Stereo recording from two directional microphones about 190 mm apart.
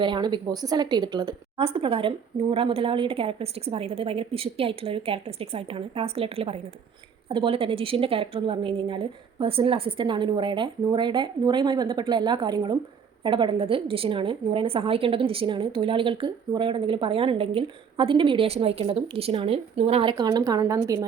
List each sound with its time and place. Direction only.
0.0 s a woman's voice: 25° right (ahead or behind)